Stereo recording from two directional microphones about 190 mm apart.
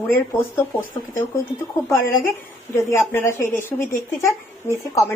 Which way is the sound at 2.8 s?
15° left (ahead or behind).